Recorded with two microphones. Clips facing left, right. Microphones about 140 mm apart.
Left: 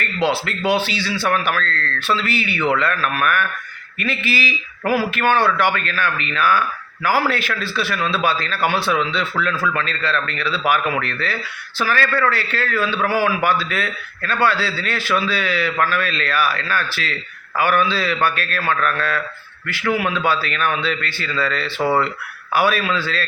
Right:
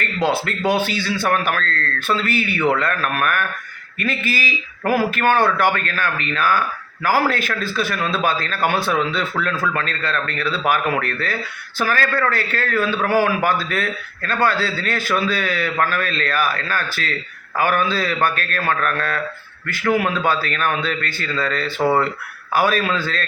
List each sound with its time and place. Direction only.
0.2 s a man's voice: 45° right (ahead or behind)